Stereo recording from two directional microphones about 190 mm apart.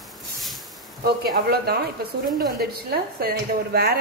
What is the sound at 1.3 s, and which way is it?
A woman's voice, 55° right (ahead or behind).